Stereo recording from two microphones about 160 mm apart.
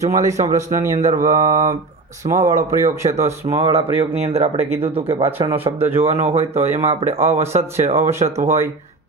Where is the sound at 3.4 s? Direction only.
35° right (ahead or behind).